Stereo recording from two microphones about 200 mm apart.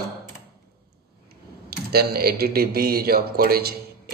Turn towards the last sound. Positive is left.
turn(degrees=-50)  # may be behind; listen again after turning